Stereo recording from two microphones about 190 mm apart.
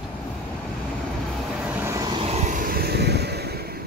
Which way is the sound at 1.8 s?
20° right (ahead or behind).